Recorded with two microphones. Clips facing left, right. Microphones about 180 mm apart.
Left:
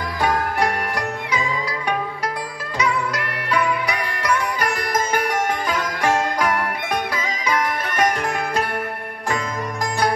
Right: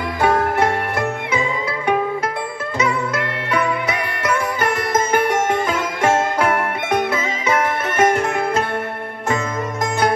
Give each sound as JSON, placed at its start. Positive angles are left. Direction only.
{"t": 0.2, "sound": "music", "side_deg": -25}
{"t": 2.8, "sound": "music", "side_deg": -25}